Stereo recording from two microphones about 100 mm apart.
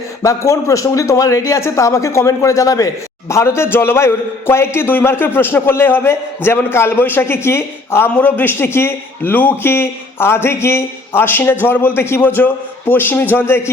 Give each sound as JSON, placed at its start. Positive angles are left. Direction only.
{"t": 0.2, "sound": "a man's voice", "side_deg": 30}